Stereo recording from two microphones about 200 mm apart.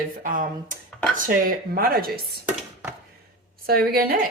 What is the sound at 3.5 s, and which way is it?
Speech, 50° right (ahead or behind).